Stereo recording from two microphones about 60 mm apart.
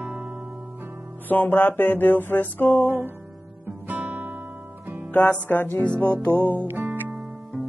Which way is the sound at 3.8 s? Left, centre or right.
Right.